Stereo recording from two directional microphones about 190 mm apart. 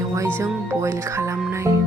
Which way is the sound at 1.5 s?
15° right (ahead or behind).